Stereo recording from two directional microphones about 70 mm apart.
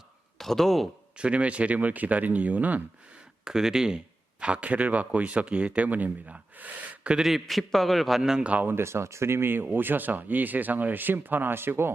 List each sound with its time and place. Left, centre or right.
0.3 s a man's voice: centre
1.1 s speech: centre
3.4 s speech: centre
7.3 s a man's voice: centre
8.4 s speech: right
8.7 s speech: right